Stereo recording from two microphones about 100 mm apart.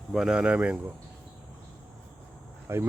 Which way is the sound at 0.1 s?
5° right (ahead or behind).